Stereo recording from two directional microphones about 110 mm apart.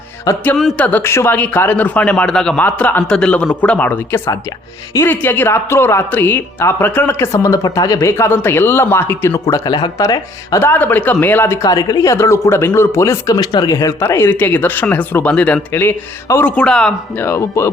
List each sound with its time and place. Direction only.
0.5 s speech: centre (ahead or behind)
0.8 s speech: 15° left (ahead or behind)
9.6 s speech: 45° left (ahead or behind)
10.0 s speech: 30° left (ahead or behind); by 16.9 s 5° left (ahead or behind)
17.2 s speech: 20° left (ahead or behind)